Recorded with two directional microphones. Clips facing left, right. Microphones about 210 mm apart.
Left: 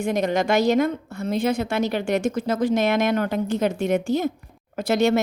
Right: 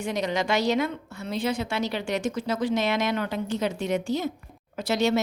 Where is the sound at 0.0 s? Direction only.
50° left (ahead or behind).